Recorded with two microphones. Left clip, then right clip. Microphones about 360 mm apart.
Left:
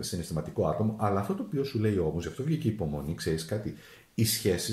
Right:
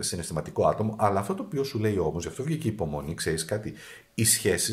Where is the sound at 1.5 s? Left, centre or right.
Centre.